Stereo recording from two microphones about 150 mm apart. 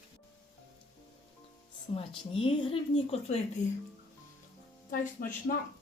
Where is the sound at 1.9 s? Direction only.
35° left (ahead or behind).